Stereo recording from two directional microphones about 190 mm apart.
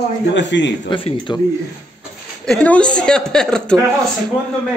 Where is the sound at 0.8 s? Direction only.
25° left (ahead or behind).